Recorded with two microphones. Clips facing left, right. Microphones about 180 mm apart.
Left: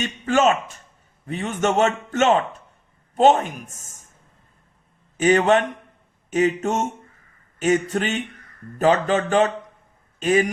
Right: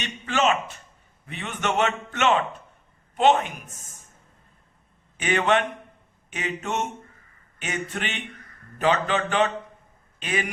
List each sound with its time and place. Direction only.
0.0 s a man's voice: 45° left (ahead or behind)
5.1 s a man's voice: 40° left (ahead or behind)